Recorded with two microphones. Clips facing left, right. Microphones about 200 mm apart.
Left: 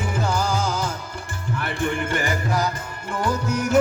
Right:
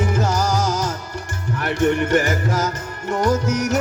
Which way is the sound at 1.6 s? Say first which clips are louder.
Right 7 dB; 75° right (ahead or behind).